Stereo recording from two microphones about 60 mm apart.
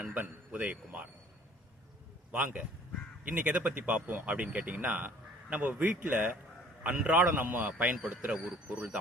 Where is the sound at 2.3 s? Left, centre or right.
Right.